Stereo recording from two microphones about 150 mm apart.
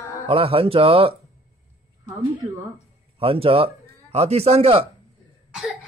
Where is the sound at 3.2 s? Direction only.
40° right (ahead or behind).